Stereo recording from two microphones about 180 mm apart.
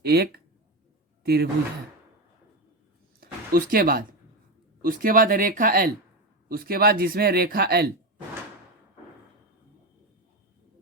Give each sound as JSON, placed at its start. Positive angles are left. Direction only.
{"t": 0.0, "sound": "a man's voice", "side_deg": -65}
{"t": 3.2, "sound": "a sound", "side_deg": -55}
{"t": 4.9, "sound": "a man's voice", "side_deg": -50}